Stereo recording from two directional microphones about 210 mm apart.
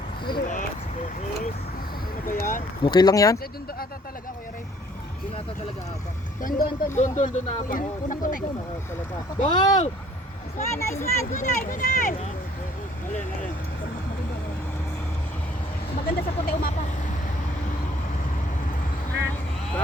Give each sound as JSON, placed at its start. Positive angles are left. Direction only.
{"t": 0.3, "sound": "a sound", "side_deg": 40}
{"t": 2.2, "sound": "speech", "side_deg": 40}
{"t": 2.8, "sound": "speech", "side_deg": 20}
{"t": 6.4, "sound": "speech", "side_deg": 40}
{"t": 10.7, "sound": "speech", "side_deg": 15}
{"t": 11.3, "sound": "speech", "side_deg": 35}
{"t": 16.0, "sound": "speech", "side_deg": 45}